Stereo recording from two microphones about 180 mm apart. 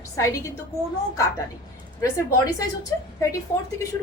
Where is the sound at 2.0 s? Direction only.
20° left (ahead or behind).